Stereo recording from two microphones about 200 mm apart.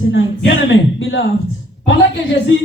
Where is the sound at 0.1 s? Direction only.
65° left (ahead or behind).